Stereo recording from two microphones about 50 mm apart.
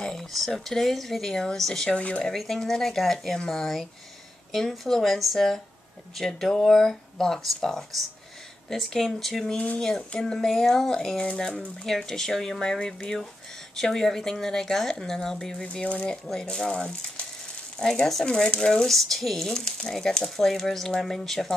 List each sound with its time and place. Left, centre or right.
0.0 s speech: centre
1.9 s speech: left
2.2 s speech: centre
15.8 s speech: left
16.3 s speech: centre